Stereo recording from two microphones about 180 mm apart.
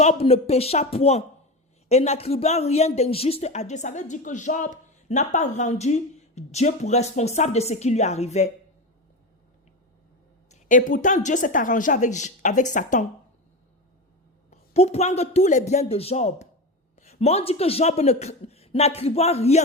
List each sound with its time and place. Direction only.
0.0 s speech: 35° left (ahead or behind)
10.5 s a woman's voice: 45° left (ahead or behind)
14.5 s speech: 35° left (ahead or behind)